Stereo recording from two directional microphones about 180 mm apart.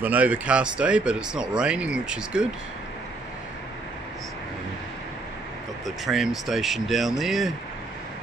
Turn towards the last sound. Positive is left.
turn(degrees=0)  # may be behind; listen again after turning